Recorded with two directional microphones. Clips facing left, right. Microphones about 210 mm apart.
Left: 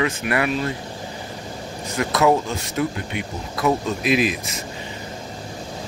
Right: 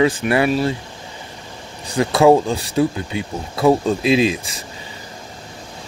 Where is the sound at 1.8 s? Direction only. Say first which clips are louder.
Right 6 dB; 30° right (ahead or behind).